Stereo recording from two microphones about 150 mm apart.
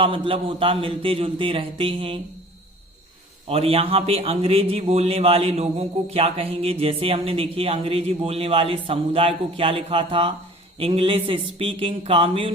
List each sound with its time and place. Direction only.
0.0 s speech: 35° right (ahead or behind)
3.4 s speech: 40° right (ahead or behind)